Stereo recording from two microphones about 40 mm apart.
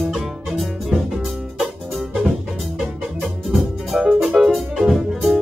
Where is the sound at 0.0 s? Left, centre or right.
Centre.